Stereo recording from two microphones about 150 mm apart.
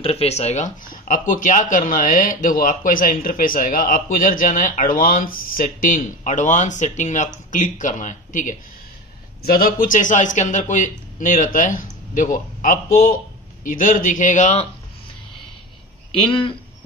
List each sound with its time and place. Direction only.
0.0 s speech: 45° left (ahead or behind); by 8.5 s 60° left (ahead or behind)
9.4 s speech: 80° left; by 14.7 s 50° left (ahead or behind)
16.1 s speech: 35° left (ahead or behind)